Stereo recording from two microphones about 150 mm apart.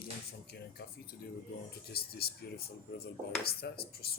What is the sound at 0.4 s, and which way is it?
Speech, 90° left.